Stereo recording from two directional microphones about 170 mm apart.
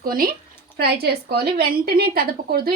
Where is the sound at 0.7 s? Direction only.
70° right (ahead or behind).